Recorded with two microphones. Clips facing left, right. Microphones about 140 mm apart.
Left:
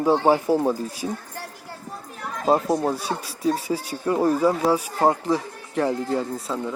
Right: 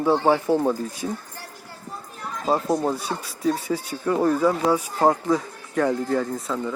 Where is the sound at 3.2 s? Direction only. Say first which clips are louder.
Even; 35° left (ahead or behind).